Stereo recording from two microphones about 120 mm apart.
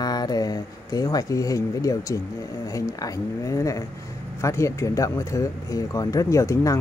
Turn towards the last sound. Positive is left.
turn(degrees=25)  # may be behind; listen again after turning